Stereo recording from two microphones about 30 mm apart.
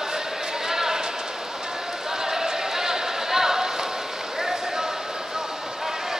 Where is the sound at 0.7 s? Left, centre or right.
Centre.